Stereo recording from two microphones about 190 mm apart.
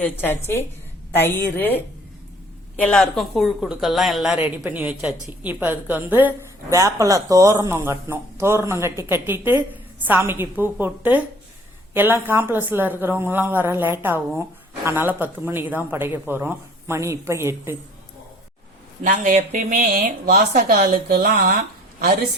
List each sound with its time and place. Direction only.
0.0 s a woman's voice: 10° left (ahead or behind)
2.8 s a woman's voice: 5° left (ahead or behind); by 17.7 s 15° right (ahead or behind)
19.0 s a woman's voice: 40° right (ahead or behind)